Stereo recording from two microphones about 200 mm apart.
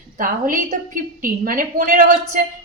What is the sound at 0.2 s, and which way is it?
Speech, 40° right (ahead or behind).